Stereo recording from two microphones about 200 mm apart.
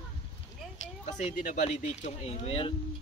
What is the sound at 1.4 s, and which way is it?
Speech, 40° left (ahead or behind).